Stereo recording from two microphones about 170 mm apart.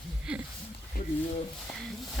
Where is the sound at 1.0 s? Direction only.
55° left (ahead or behind).